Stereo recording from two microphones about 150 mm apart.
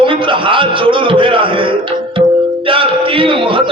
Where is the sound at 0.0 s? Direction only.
35° right (ahead or behind).